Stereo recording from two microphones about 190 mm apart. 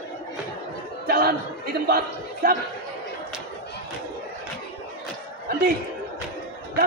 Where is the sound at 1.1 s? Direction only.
50° right (ahead or behind).